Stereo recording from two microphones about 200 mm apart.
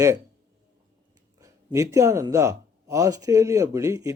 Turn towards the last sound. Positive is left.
turn(degrees=-15)  # may be behind; listen again after turning